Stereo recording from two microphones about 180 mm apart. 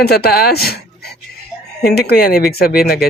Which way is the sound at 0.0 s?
60° left (ahead or behind).